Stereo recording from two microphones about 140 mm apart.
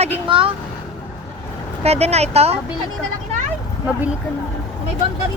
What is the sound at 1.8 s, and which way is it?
Speech, 50° right (ahead or behind).